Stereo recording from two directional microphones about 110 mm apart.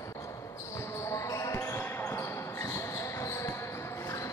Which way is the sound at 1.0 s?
25° left (ahead or behind).